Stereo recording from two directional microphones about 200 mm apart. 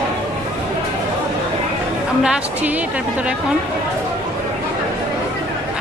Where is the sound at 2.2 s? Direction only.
5° right (ahead or behind).